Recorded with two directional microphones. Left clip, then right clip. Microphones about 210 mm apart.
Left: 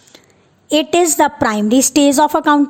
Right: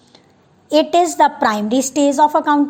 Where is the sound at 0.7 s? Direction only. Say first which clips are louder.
Even; 55° left (ahead or behind).